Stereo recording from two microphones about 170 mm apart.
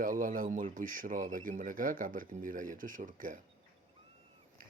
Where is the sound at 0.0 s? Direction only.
50° right (ahead or behind).